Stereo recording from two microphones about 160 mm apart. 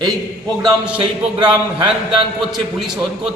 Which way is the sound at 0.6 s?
5° right (ahead or behind).